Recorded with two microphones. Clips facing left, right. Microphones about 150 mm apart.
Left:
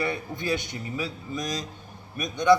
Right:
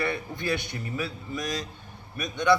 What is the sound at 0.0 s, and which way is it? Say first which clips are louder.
A man's voice: even; 20° left (ahead or behind).